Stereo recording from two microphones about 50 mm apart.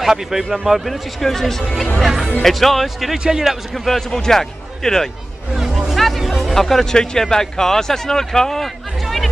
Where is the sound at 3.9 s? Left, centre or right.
Centre.